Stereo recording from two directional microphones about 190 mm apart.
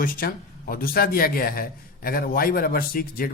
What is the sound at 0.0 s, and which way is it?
Speech, 50° left (ahead or behind).